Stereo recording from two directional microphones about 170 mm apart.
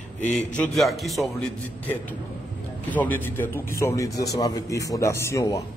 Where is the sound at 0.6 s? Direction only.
Centre (ahead or behind).